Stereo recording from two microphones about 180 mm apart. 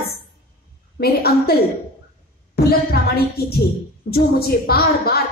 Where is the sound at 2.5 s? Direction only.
60° left (ahead or behind).